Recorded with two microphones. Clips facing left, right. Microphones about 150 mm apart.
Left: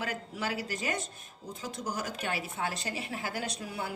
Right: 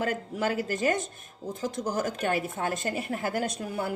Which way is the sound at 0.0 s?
45° right (ahead or behind).